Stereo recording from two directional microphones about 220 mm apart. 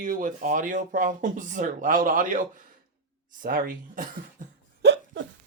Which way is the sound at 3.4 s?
40° right (ahead or behind).